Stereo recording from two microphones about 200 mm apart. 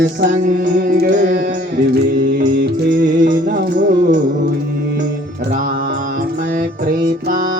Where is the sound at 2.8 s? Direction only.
45° right (ahead or behind).